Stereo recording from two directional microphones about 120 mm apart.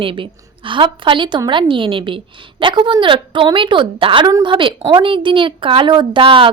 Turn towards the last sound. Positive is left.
turn(degrees=-45)  # may be behind; listen again after turning